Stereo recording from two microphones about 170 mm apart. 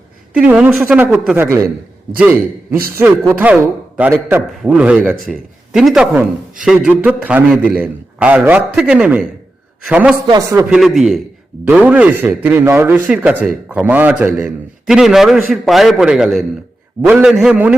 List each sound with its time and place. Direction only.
0.3 s a man's voice: 10° right (ahead or behind)
10.2 s a man's voice: 20° right (ahead or behind)
10.7 s a man's voice: 5° right (ahead or behind)